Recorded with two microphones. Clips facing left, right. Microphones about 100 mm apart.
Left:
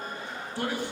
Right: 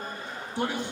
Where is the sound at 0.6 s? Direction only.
20° right (ahead or behind).